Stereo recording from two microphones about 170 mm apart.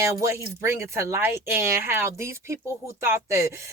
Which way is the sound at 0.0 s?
15° right (ahead or behind).